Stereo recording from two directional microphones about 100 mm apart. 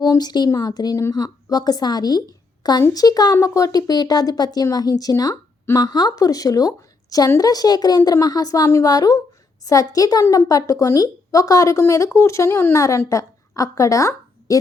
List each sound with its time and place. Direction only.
0.0 s a woman's voice: 45° left (ahead or behind)